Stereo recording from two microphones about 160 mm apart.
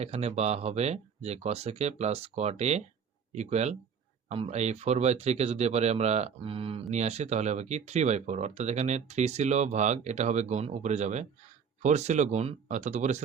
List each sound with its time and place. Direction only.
0.0 s speech: 45° right (ahead or behind)